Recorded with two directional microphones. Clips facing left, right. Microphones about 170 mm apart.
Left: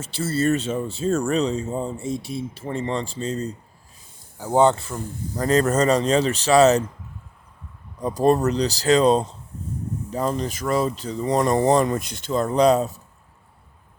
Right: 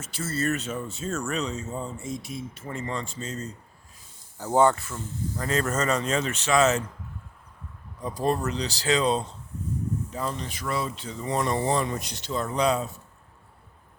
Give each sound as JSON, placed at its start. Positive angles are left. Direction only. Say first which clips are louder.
{"t": 0.0, "sound": "speech", "louder": "left 6 dB", "side_deg": 30}
{"t": 4.4, "sound": "speech", "louder": "left 3 dB", "side_deg": 15}
{"t": 8.0, "sound": "speech", "louder": "left 8 dB", "side_deg": 40}